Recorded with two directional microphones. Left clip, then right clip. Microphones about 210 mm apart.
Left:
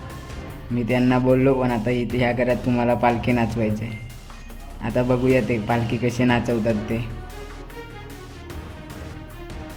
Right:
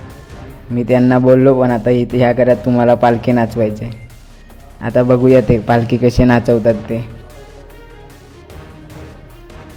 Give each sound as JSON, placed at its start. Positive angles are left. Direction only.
{"t": 0.8, "sound": "a man's voice", "side_deg": -20}